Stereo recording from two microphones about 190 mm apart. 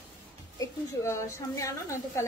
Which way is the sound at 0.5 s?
15° left (ahead or behind).